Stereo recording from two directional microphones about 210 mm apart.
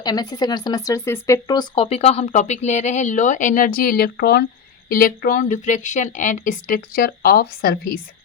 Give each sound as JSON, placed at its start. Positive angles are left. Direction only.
{"t": 0.0, "sound": "speech", "side_deg": 20}